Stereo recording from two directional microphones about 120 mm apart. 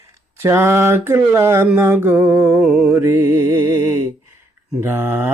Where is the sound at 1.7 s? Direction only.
20° right (ahead or behind).